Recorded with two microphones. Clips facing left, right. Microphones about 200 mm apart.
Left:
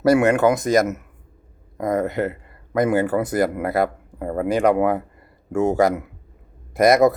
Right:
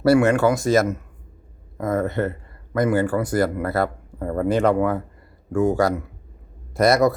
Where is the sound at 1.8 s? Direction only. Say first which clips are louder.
Left 1 dB; 15° left (ahead or behind).